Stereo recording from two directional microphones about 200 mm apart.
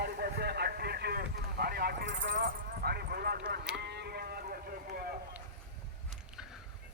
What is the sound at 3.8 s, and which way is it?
Sheep, 55° right (ahead or behind).